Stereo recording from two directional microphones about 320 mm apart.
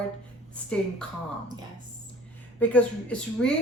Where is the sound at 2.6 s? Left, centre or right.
Centre.